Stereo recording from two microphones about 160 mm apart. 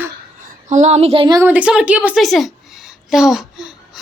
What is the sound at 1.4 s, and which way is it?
A woman's voice, 10° right (ahead or behind).